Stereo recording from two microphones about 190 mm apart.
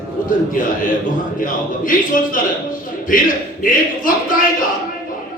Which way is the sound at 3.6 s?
45° left (ahead or behind).